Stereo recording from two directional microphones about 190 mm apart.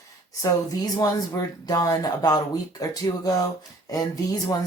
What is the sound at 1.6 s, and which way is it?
Speech, 20° left (ahead or behind).